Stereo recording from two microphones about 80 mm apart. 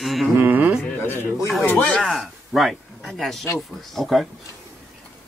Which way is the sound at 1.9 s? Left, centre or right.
Centre.